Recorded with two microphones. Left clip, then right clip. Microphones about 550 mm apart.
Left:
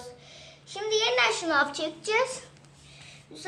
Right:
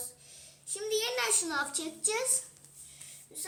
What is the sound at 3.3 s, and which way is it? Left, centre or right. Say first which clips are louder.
Child singing: left 2 dB; right.